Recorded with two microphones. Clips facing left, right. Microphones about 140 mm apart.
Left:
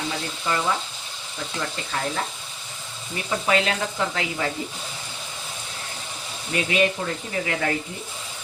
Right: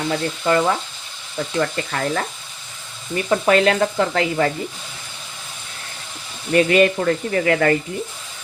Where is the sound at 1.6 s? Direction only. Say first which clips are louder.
Right 7 dB; 65° right (ahead or behind).